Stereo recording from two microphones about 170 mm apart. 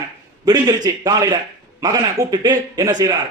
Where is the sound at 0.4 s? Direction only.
25° right (ahead or behind).